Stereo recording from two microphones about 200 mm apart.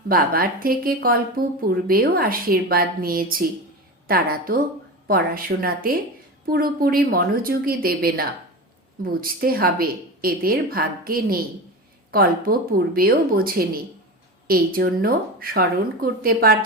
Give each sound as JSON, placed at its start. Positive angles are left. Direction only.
{"t": 0.1, "sound": "a woman's voice", "side_deg": -45}